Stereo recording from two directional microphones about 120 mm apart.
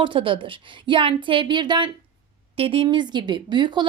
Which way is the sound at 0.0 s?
45° right (ahead or behind).